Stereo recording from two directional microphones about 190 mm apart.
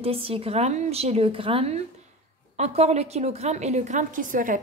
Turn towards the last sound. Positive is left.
turn(degrees=-45)  # may be behind; listen again after turning